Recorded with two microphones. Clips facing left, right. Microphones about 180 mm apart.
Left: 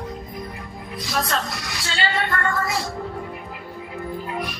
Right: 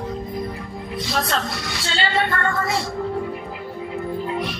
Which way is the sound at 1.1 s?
25° right (ahead or behind).